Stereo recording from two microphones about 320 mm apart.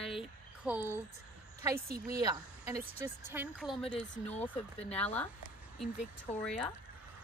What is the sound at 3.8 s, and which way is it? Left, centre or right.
Speech, centre.